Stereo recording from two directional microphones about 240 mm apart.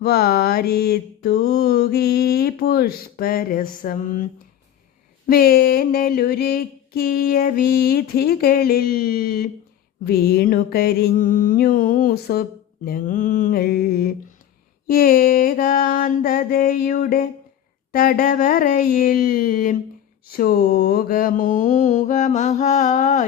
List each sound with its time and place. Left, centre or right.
0.0 s mantra: left